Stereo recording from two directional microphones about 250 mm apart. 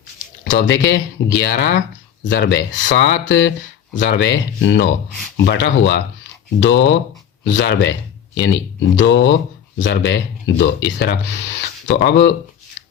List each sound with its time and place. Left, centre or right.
0.4 s speech: left